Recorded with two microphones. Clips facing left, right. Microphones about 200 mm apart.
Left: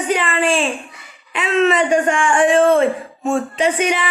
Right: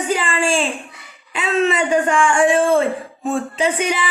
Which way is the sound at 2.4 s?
30° right (ahead or behind).